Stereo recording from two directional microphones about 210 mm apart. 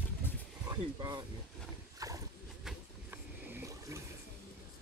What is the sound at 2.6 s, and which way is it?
Vehicle, 5° right (ahead or behind).